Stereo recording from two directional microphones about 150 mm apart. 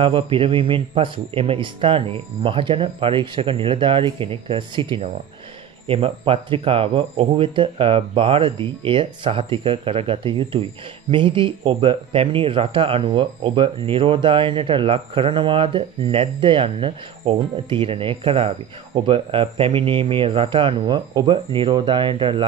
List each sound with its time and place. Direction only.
0.0 s speech: 35° right (ahead or behind)